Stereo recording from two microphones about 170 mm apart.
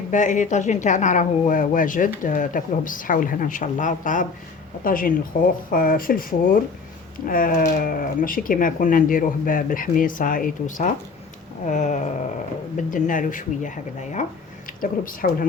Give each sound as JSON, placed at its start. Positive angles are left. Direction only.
{"t": 0.1, "sound": "speech", "side_deg": 45}